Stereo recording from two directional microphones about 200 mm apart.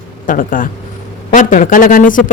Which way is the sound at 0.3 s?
45° left (ahead or behind).